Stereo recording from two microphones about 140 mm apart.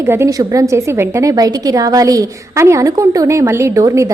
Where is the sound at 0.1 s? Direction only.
20° right (ahead or behind).